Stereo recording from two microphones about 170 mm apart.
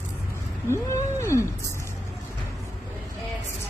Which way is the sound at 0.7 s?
15° left (ahead or behind).